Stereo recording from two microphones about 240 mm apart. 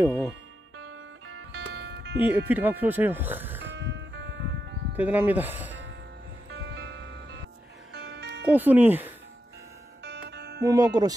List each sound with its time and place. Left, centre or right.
0.9 s music: right
1.5 s music: right
2.1 s speech: centre
3.7 s music: right
4.9 s speech: centre
6.5 s music: right
8.5 s speech: centre
10.0 s music: right
10.6 s speech: centre